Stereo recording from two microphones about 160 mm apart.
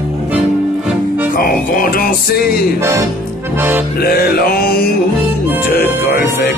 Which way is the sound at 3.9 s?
70° left (ahead or behind).